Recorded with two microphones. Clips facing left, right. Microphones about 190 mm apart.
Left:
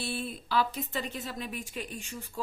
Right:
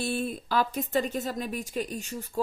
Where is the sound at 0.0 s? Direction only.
45° right (ahead or behind).